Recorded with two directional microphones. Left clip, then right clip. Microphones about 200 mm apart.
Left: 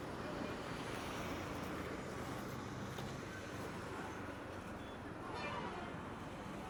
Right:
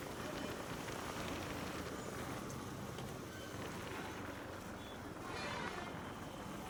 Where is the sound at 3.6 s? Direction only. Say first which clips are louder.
Right 2 dB; centre (ahead or behind).